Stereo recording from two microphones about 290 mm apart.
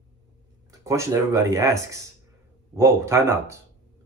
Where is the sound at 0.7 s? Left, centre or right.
Centre.